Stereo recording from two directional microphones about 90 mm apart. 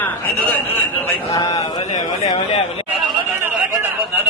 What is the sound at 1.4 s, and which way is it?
Speech, 45° left (ahead or behind).